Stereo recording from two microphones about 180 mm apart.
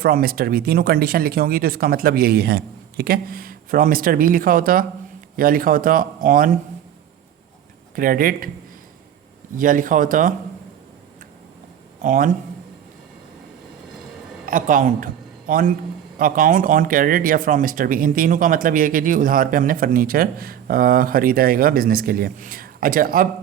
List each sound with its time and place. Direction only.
0.0 s a man's voice: 55° right (ahead or behind)
7.9 s a man's voice: 50° right (ahead or behind)
9.6 s a man's voice: 50° right (ahead or behind)
12.0 s a man's voice: 45° right (ahead or behind)
14.4 s a man's voice: 50° right (ahead or behind)